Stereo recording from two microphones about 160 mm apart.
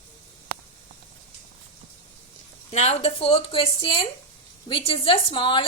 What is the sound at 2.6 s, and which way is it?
A woman's voice, 40° left (ahead or behind).